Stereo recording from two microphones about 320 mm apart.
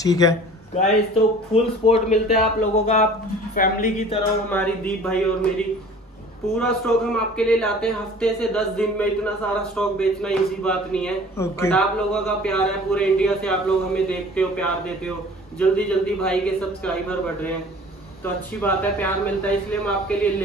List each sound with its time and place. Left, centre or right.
0.0 s speech: centre
4.5 s a man's voice: centre
6.6 s a man's voice: centre